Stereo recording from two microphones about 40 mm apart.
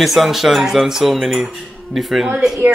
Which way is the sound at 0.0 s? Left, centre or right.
Centre.